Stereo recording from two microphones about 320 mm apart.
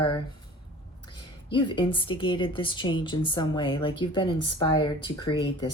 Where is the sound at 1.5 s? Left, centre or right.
Centre.